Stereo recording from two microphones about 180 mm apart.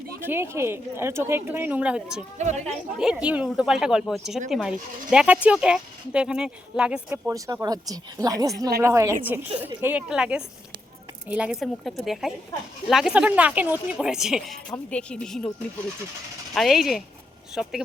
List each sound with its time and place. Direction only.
0.2 s speech: 15° right (ahead or behind)
2.4 s speech: 40° right (ahead or behind)
3.0 s speech: 5° right (ahead or behind)
16.6 s speech: centre (ahead or behind)